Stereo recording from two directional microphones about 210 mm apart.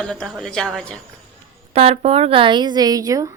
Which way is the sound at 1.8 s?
30° right (ahead or behind).